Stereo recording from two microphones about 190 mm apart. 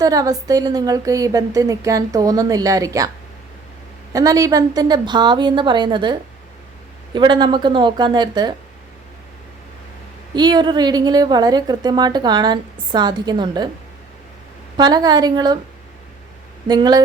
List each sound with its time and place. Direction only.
0.0 s a woman's voice: 20° right (ahead or behind)
4.1 s a woman's voice: 20° right (ahead or behind)
10.3 s a woman's voice: 20° right (ahead or behind)
14.8 s a woman's voice: 20° right (ahead or behind)
16.6 s a woman's voice: 20° right (ahead or behind)